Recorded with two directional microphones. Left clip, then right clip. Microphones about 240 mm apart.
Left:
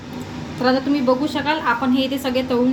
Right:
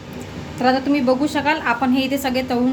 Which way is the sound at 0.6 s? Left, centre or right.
Right.